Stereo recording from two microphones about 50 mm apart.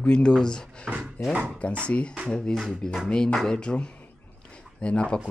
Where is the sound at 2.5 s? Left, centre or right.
Centre.